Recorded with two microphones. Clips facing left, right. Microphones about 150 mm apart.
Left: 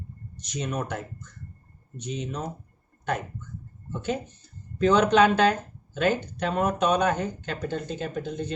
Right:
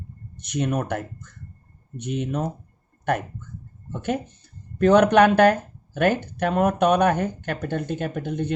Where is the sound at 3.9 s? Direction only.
60° right (ahead or behind).